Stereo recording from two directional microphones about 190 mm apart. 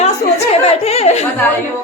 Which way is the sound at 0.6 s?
35° left (ahead or behind).